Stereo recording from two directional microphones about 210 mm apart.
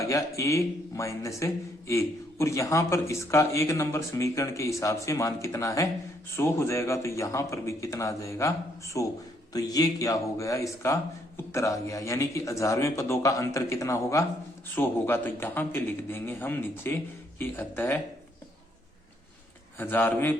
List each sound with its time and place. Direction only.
0.0 s a man's voice: 15° left (ahead or behind)
19.8 s a man's voice: 10° left (ahead or behind)